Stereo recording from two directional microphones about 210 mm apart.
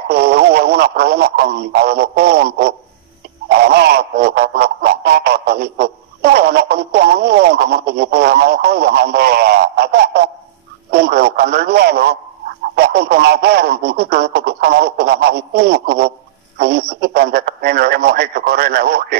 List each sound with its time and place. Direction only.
0.1 s speech: 50° right (ahead or behind)